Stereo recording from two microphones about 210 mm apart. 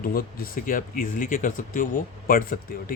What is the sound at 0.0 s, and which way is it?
Speech, 45° left (ahead or behind).